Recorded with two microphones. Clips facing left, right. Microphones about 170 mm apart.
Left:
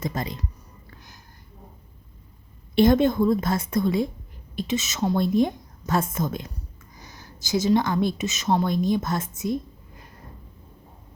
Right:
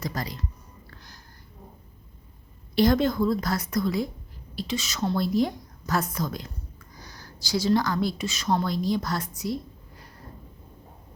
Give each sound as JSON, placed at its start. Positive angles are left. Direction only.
{"t": 0.0, "sound": "a woman's voice", "side_deg": 25}
{"t": 0.9, "sound": "a sound", "side_deg": 20}
{"t": 2.7, "sound": "a woman's voice", "side_deg": 25}